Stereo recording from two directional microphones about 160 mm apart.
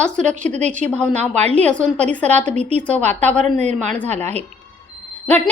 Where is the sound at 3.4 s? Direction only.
45° right (ahead or behind).